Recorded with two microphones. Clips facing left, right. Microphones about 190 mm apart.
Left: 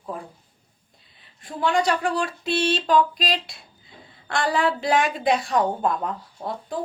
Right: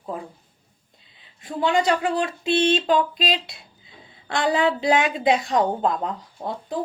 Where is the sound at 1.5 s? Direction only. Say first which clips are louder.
Right 1 dB; 20° right (ahead or behind).